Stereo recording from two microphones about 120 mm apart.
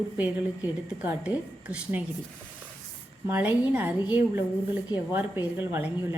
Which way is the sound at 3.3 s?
15° right (ahead or behind).